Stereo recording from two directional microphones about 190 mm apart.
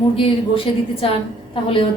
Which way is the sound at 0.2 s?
30° left (ahead or behind).